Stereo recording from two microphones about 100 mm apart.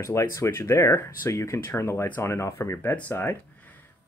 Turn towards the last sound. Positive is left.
turn(degrees=20)  # may be behind; listen again after turning